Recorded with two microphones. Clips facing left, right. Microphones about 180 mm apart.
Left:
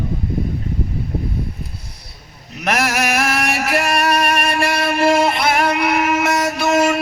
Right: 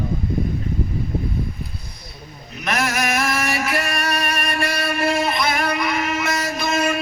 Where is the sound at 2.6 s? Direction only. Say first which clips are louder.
Left 3 dB; 70° left (ahead or behind).